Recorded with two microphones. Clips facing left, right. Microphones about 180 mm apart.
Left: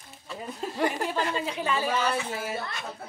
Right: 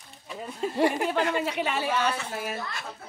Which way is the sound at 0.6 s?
Centre (ahead or behind).